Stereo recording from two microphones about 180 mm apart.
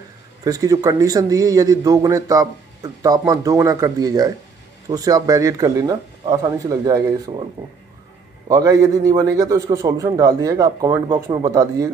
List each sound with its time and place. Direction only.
0.4 s a man's voice: 20° right (ahead or behind)
8.5 s a man's voice: 20° right (ahead or behind)